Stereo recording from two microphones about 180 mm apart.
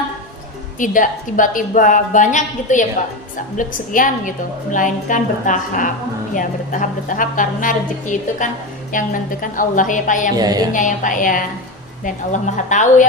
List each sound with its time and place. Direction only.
0.8 s a woman's voice: 45° left (ahead or behind)
10.3 s speech: 20° right (ahead or behind)
10.7 s a woman's voice: 45° left (ahead or behind)